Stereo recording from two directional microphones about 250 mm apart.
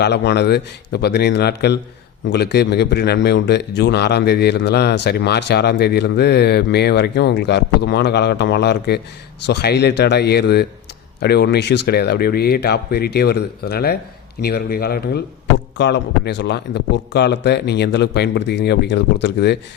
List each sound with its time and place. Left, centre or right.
0.0 s speech: left